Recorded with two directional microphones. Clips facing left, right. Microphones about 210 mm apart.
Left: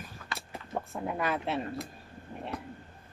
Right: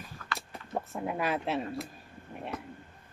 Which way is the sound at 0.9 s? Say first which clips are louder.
Even; 5° right (ahead or behind).